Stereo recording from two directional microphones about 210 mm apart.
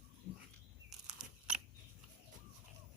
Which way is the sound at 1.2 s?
5° right (ahead or behind).